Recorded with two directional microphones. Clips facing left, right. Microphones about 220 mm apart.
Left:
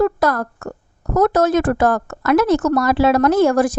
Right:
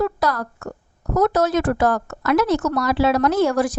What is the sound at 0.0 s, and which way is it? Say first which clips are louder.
Speech: left 5 dB; 50° left (ahead or behind).